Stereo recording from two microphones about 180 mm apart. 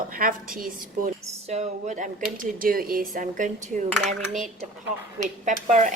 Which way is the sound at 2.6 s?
55° right (ahead or behind).